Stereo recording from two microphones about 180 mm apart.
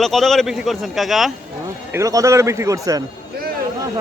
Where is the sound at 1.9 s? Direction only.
15° right (ahead or behind).